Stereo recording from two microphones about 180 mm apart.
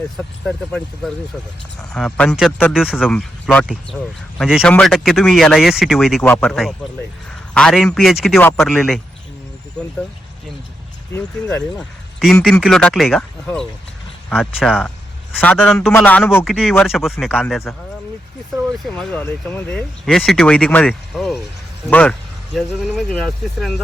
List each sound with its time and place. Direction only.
0.4 s speech: 5° left (ahead or behind)
8.4 s speech: 10° left (ahead or behind)
8.6 s speech: centre (ahead or behind)
11.1 s speech: 10° left (ahead or behind)
14.3 s speech: centre (ahead or behind)
16.4 s speech: 5° right (ahead or behind)
17.2 s speech: 10° left (ahead or behind)
18.5 s speech: centre (ahead or behind)